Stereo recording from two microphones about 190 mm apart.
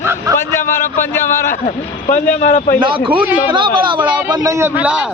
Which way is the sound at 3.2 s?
10° right (ahead or behind).